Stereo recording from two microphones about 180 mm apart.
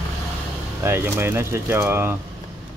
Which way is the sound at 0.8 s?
15° right (ahead or behind).